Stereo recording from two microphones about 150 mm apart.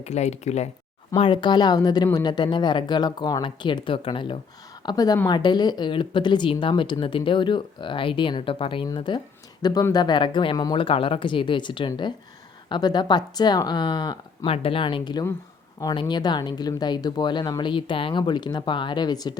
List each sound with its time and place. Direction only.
0.0 s speech: 50° left (ahead or behind)
1.1 s speech: 35° left (ahead or behind)